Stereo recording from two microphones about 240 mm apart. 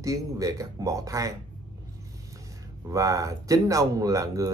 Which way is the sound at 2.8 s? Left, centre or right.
Centre.